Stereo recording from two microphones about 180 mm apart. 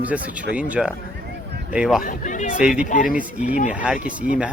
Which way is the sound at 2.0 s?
45° left (ahead or behind).